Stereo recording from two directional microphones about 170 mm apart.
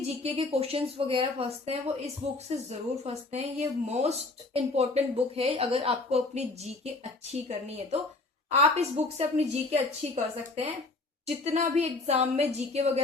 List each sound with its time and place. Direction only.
0.2 s speech: 35° right (ahead or behind)